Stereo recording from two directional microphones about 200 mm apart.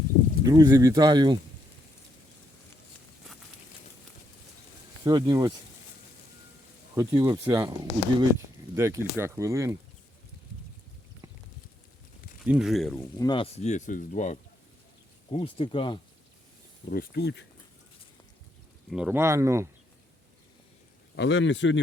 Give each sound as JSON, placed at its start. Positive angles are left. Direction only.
{"t": 0.4, "sound": "speech", "side_deg": -15}
{"t": 5.0, "sound": "speech", "side_deg": -20}
{"t": 6.9, "sound": "speech", "side_deg": -15}
{"t": 12.5, "sound": "speech", "side_deg": 0}
{"t": 13.1, "sound": "speech", "side_deg": 20}
{"t": 15.3, "sound": "speech", "side_deg": 30}
{"t": 16.9, "sound": "speech", "side_deg": 50}
{"t": 18.9, "sound": "speech", "side_deg": -5}
{"t": 21.2, "sound": "speech", "side_deg": 65}